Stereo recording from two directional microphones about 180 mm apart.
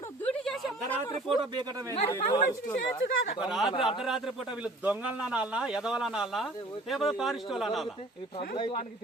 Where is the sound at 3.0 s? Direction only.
75° left (ahead or behind).